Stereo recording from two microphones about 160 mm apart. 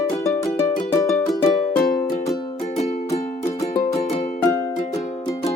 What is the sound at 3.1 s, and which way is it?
Music, 45° left (ahead or behind).